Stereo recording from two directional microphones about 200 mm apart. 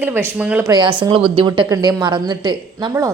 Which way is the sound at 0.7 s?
25° right (ahead or behind).